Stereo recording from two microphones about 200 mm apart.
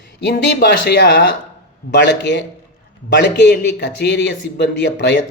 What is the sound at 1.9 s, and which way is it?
A man's voice, 60° left (ahead or behind).